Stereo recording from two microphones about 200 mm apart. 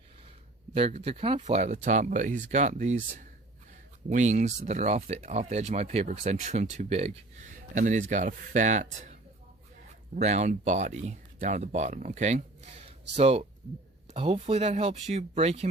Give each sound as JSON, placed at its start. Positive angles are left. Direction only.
{"t": 0.7, "sound": "speech", "side_deg": -30}
{"t": 10.2, "sound": "speech", "side_deg": -35}